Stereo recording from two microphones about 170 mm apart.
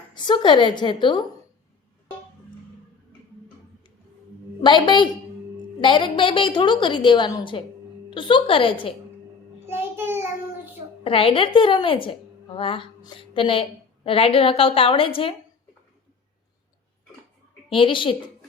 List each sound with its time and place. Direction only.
0.1 s a woman's voice: 25° left (ahead or behind)
4.6 s a woman's voice: 25° left (ahead or behind)
9.6 s child singing: 15° right (ahead or behind)
11.0 s a woman's voice: 30° left (ahead or behind)
17.7 s a woman's voice: 30° left (ahead or behind)